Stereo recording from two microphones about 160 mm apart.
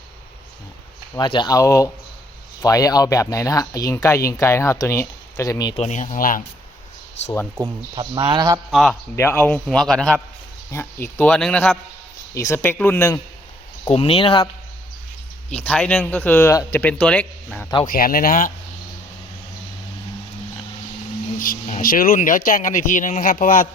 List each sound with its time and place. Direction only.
1.1 s speech: 30° left (ahead or behind)
5.7 s speech: 45° left (ahead or behind)
7.9 s speech: 30° right (ahead or behind)
8.7 s a man's voice: centre (ahead or behind)
9.1 s speech: 15° left (ahead or behind)
9.6 s a man's voice: 5° left (ahead or behind)
10.7 s speech: 15° left (ahead or behind)
12.3 s speech: 15° left (ahead or behind)
13.8 s speech: 35° left (ahead or behind)
15.4 s speech: 10° left (ahead or behind)
17.8 s speech: 65° left (ahead or behind)
21.3 s speech: 60° left (ahead or behind)